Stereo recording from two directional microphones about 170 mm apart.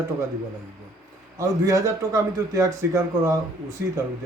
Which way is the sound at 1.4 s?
20° right (ahead or behind).